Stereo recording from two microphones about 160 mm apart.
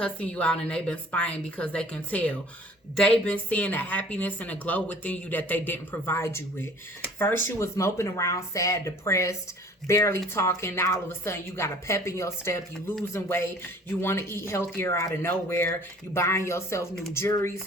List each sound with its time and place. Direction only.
0.0 s a woman's voice: 5° left (ahead or behind)